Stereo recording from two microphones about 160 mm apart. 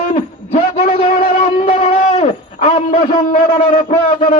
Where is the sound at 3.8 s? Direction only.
40° left (ahead or behind).